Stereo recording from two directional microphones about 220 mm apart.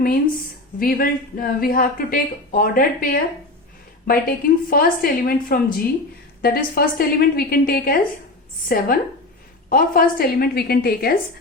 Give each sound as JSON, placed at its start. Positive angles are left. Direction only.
{"t": 0.8, "sound": "a woman's voice", "side_deg": 40}